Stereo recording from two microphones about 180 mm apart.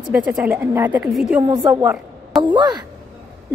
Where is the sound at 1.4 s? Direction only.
20° right (ahead or behind).